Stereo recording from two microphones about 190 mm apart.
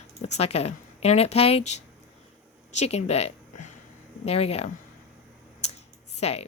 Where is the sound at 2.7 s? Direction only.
35° left (ahead or behind).